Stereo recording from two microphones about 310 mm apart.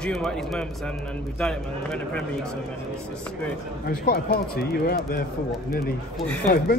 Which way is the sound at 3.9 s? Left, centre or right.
Left.